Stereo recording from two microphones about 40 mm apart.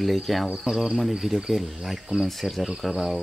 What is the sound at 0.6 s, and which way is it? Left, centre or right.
Speech, centre.